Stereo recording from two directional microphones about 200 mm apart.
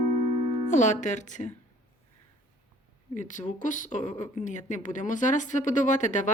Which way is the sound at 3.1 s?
40° left (ahead or behind).